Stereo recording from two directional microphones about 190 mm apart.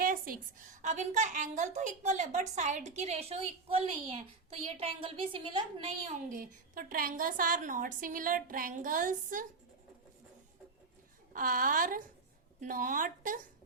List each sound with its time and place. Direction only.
0.0 s a woman's voice: 50° right (ahead or behind); by 5.9 s 25° right (ahead or behind)
6.2 s a woman's voice: 45° right (ahead or behind)
11.3 s a woman's voice: 50° right (ahead or behind)